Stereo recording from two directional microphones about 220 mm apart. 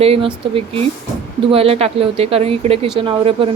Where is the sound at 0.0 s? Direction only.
25° right (ahead or behind).